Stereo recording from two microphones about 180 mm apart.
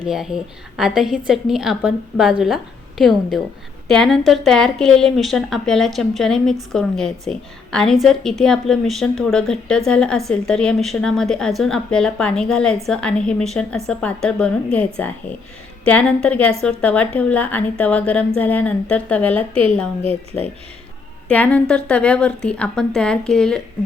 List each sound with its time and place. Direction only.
0.0 s a woman's voice: 5° right (ahead or behind)
3.8 s a woman's voice: 5° left (ahead or behind)